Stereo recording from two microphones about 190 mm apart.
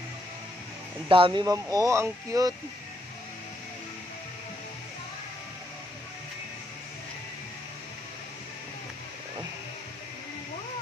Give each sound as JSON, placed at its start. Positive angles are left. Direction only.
{"t": 1.0, "sound": "speech", "side_deg": -25}